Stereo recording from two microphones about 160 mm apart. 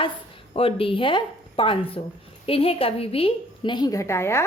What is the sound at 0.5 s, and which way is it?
A woman's voice, 35° left (ahead or behind).